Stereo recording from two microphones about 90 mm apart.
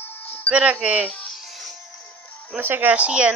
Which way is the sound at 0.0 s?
20° left (ahead or behind).